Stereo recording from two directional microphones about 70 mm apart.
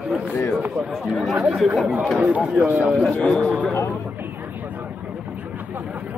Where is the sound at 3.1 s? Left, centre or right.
Centre.